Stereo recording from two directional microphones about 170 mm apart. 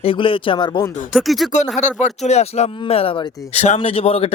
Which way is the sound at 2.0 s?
40° left (ahead or behind).